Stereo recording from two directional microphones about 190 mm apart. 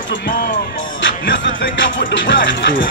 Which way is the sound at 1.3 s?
75° left (ahead or behind).